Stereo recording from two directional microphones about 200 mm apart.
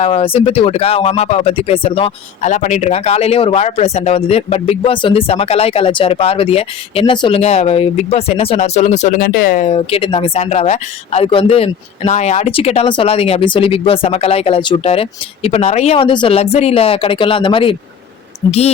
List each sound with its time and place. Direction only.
0.0 s speech: 30° left (ahead or behind); by 9.6 s 45° left (ahead or behind)
9.6 s speech: 30° left (ahead or behind)